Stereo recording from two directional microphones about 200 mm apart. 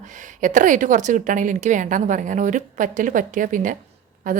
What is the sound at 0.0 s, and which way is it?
A woman's voice, 40° right (ahead or behind).